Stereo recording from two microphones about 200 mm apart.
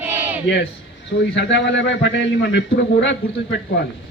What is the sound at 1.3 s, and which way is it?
A man's voice, 60° left (ahead or behind).